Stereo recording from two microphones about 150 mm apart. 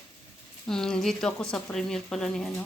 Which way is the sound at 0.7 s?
5° left (ahead or behind).